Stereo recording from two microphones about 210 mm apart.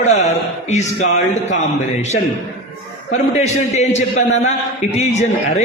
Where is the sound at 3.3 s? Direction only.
30° left (ahead or behind).